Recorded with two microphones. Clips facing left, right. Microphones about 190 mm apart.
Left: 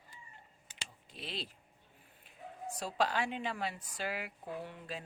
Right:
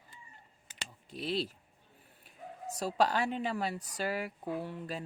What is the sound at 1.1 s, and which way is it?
Speech, 40° right (ahead or behind).